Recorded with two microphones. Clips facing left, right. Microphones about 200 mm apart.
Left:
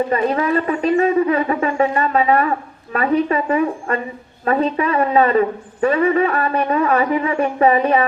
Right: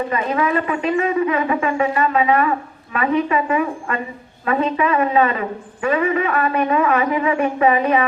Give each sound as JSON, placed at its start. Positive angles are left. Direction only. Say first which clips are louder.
{"t": 0.1, "sound": "a woman's voice", "louder": "left 2 dB", "side_deg": 40}